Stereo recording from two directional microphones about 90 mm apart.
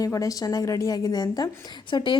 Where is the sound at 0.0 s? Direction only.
40° left (ahead or behind).